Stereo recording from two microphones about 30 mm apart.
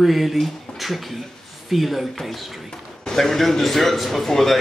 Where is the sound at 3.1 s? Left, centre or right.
Centre.